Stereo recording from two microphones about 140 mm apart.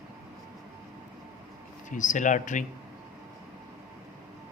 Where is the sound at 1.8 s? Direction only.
65° left (ahead or behind).